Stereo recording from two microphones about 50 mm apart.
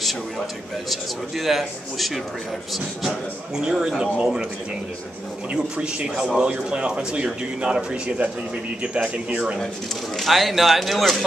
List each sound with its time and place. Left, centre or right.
0.8 s a man's voice: centre
3.5 s a man's voice: centre
5.5 s a man's voice: right
10.1 s a man's voice: centre